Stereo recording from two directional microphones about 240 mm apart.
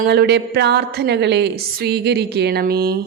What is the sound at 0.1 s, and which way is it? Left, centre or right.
Speech, right.